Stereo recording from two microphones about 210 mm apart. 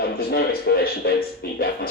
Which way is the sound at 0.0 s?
45° left (ahead or behind).